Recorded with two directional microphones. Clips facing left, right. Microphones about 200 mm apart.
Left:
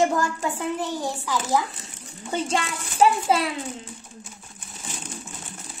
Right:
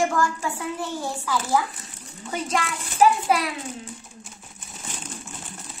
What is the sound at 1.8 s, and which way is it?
A child's voice, 25° left (ahead or behind).